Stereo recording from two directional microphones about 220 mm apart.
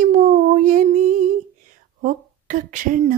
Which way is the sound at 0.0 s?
35° right (ahead or behind).